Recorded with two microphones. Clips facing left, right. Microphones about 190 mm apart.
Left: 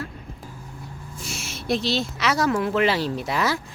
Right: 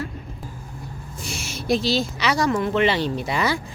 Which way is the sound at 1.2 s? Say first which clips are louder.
Right 3 dB; centre (ahead or behind).